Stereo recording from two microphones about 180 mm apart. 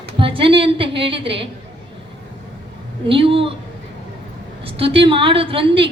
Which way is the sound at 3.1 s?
30° right (ahead or behind).